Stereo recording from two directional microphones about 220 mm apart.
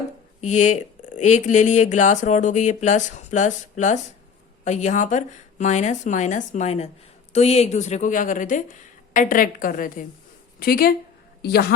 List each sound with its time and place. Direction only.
0.4 s speech: 35° left (ahead or behind)